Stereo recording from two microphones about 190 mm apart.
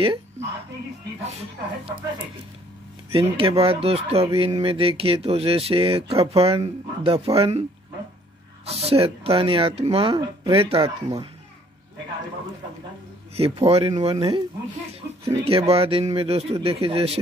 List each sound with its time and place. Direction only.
0.0 s a woman's voice: 30° right (ahead or behind)
3.1 s speech: 30° right (ahead or behind)
8.6 s speech: 35° right (ahead or behind)
13.4 s speech: 30° right (ahead or behind)